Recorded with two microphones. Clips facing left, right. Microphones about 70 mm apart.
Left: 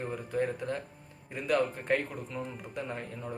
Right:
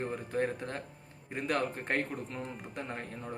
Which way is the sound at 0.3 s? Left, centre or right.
Right.